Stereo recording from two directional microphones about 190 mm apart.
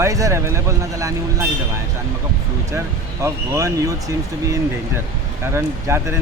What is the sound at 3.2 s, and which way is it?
Speech, 15° right (ahead or behind).